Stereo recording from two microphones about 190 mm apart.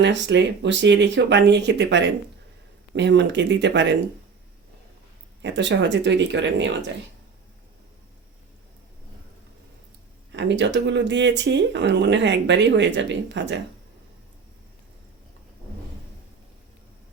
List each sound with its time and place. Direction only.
0.0 s speech: 70° right (ahead or behind)
5.4 s speech: 70° right (ahead or behind)
10.3 s speech: 70° right (ahead or behind)